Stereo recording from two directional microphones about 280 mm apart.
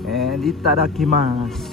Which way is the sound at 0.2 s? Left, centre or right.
Centre.